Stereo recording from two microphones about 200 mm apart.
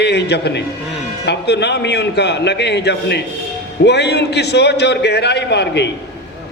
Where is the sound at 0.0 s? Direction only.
55° left (ahead or behind).